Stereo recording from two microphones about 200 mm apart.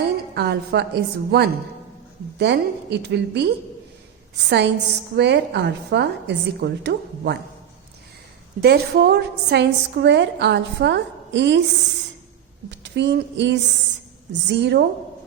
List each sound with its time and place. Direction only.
0.3 s a woman's voice: 55° right (ahead or behind)
8.6 s a woman's voice: 55° right (ahead or behind)
12.7 s a woman's voice: 60° right (ahead or behind)